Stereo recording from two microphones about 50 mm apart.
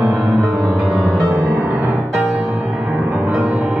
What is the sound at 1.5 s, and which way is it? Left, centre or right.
Music, right.